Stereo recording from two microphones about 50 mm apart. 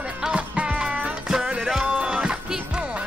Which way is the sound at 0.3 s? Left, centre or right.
Right.